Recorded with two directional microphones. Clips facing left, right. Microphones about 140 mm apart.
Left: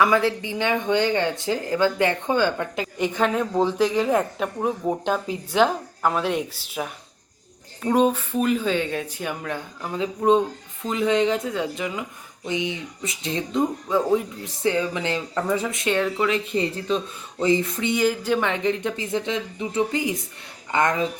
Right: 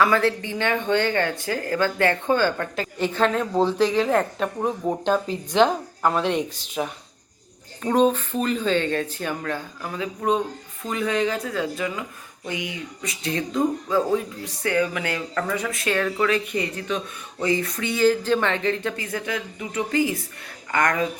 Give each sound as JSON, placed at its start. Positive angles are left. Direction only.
{"t": 0.0, "sound": "speech", "side_deg": 15}
{"t": 9.8, "sound": "speech", "side_deg": 25}